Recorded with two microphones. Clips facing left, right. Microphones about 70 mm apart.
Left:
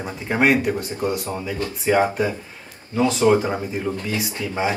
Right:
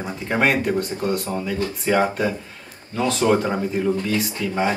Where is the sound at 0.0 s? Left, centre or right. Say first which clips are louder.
Left 1 dB; centre.